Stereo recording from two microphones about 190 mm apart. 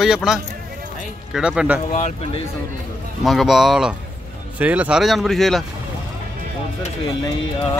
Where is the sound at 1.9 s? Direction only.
35° left (ahead or behind).